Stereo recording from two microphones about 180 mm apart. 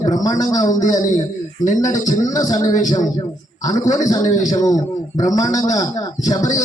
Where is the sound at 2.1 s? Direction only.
20° left (ahead or behind).